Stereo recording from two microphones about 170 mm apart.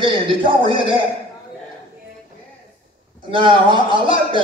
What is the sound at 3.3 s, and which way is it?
Speech, 30° right (ahead or behind).